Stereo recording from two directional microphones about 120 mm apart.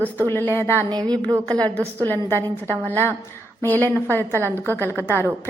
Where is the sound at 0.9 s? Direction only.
35° right (ahead or behind).